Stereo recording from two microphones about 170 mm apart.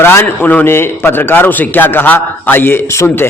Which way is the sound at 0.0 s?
15° left (ahead or behind).